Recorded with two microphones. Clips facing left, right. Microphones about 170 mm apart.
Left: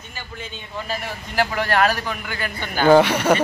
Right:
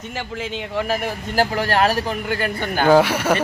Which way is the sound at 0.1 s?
85° right.